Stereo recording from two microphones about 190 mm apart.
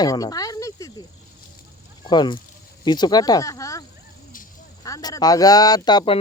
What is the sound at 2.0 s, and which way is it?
Speech, 25° left (ahead or behind).